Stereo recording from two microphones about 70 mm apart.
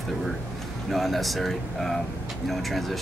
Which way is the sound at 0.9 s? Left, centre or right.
Centre.